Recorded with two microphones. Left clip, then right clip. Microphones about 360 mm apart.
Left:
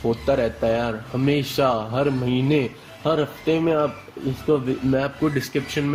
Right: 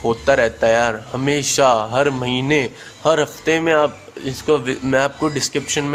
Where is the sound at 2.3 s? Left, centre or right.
Right.